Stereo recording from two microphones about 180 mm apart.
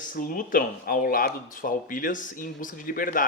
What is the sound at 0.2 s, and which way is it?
Speech, 50° left (ahead or behind).